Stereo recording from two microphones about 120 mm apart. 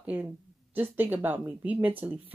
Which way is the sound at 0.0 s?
10° right (ahead or behind).